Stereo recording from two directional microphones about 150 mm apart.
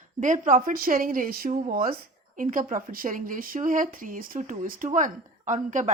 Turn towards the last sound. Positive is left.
turn(degrees=-55)  # may be behind; listen again after turning